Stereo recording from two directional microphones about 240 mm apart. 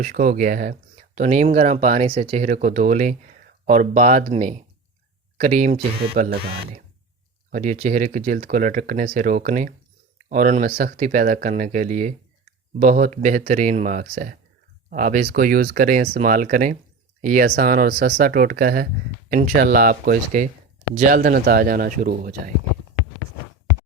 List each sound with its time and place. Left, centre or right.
0.0 s speech: right